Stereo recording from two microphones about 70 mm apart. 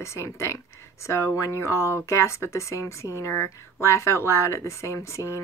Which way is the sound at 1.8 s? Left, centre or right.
Right.